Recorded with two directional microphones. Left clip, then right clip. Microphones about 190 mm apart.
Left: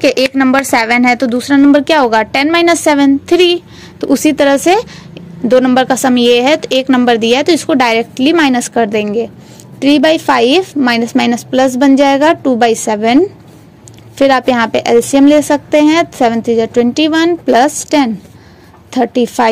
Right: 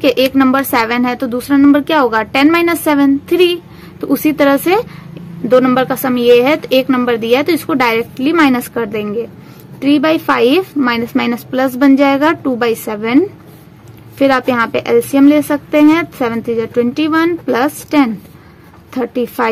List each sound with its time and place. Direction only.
0.0 s a woman's voice: 20° left (ahead or behind)